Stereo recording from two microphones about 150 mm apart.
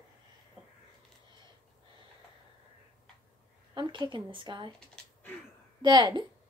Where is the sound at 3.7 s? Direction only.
30° right (ahead or behind).